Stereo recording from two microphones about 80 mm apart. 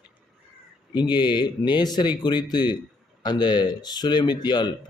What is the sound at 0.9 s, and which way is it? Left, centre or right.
Speech, left.